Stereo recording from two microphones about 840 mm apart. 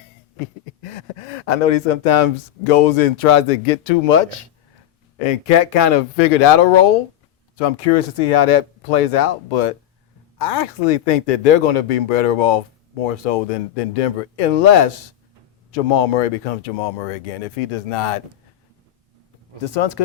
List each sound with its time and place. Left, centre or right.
0.8 s speech: left
5.2 s speech: left
7.5 s speech: left
15.7 s speech: left
19.6 s speech: left